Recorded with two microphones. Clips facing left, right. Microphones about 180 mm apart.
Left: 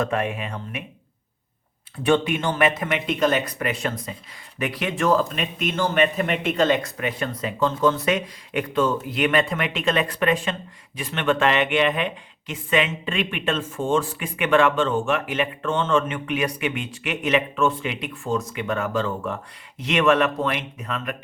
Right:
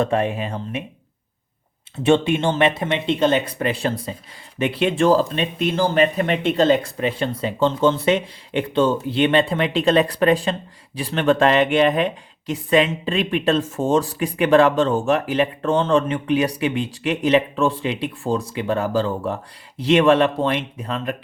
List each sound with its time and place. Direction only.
0.0 s speech: 30° right (ahead or behind)
2.0 s speech: 25° right (ahead or behind)